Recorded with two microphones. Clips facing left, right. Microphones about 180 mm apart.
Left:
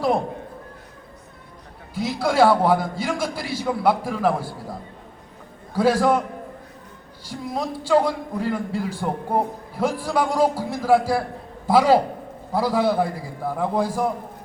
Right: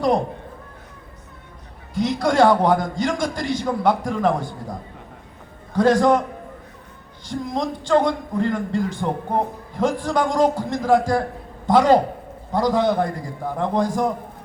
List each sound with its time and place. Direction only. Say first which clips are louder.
2.0 s a man's voice: right 2 dB; 5° left (ahead or behind)
7.3 s a man's voice: right 3 dB; 10° left (ahead or behind)